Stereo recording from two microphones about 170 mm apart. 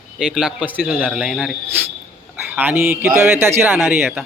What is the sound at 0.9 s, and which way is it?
A man's voice, centre (ahead or behind).